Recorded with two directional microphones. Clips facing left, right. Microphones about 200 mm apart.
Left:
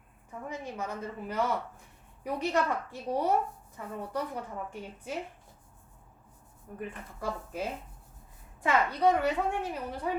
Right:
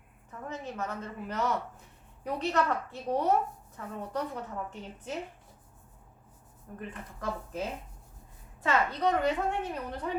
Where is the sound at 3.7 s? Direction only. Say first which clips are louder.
Even; 10° left (ahead or behind).